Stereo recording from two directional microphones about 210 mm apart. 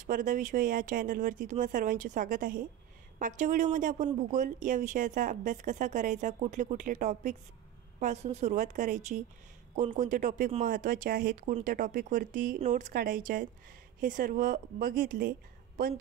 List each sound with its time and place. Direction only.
0.0 s speech: 40° right (ahead or behind)